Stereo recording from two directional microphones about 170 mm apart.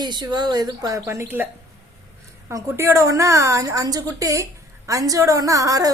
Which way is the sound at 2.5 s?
15° right (ahead or behind).